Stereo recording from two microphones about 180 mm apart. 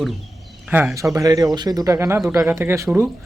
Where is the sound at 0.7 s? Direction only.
10° right (ahead or behind).